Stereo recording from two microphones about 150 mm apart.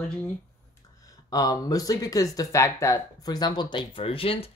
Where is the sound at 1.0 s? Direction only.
25° left (ahead or behind).